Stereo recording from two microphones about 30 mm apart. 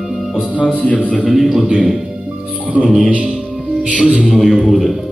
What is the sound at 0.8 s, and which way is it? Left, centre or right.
Speech, left.